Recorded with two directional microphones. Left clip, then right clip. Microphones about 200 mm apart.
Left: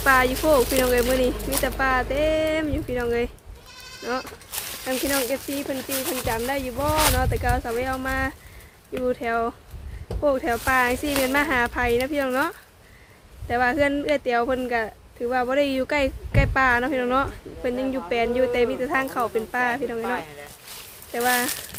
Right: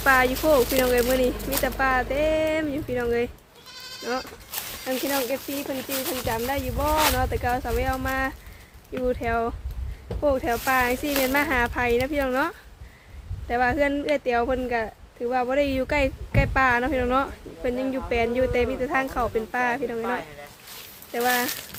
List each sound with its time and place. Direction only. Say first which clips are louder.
0.0 s speech: left 1 dB; centre (ahead or behind)
20.0 s speech: left 1 dB; 60° left (ahead or behind)
21.1 s speech: left 1 dB; centre (ahead or behind)